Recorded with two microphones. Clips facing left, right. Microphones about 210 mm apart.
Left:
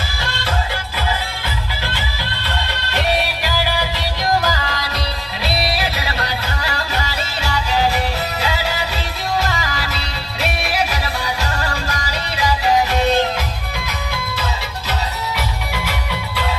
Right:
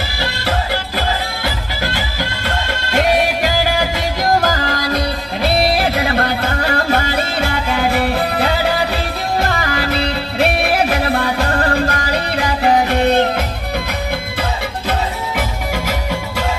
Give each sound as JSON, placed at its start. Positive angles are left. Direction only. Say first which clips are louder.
{"t": 1.8, "sound": "music", "louder": "right 5 dB", "side_deg": -45}
{"t": 15.4, "sound": "music", "louder": "right 4 dB", "side_deg": -45}